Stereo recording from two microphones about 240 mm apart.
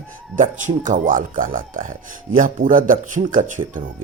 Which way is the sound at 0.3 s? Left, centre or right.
Right.